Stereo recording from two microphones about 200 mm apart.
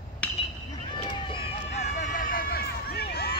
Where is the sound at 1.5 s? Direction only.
40° left (ahead or behind).